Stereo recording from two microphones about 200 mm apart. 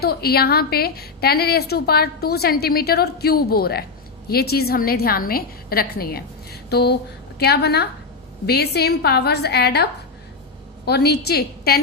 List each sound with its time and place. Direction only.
0.0 s a woman's voice: 50° left (ahead or behind)
10.8 s a woman's voice: 55° left (ahead or behind)